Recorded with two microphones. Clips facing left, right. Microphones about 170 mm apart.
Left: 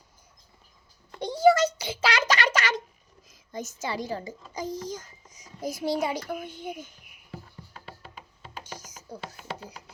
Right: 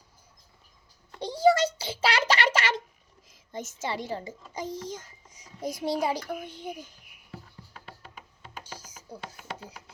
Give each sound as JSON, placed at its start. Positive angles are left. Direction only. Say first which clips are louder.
{"t": 1.2, "sound": "a sound", "louder": "left 2 dB", "side_deg": -30}
{"t": 3.2, "sound": "a child's voice", "louder": "left 1 dB", "side_deg": -25}
{"t": 8.6, "sound": "music", "louder": "left 2 dB", "side_deg": -30}